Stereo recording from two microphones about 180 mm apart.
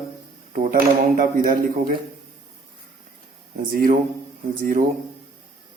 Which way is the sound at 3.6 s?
50° right (ahead or behind).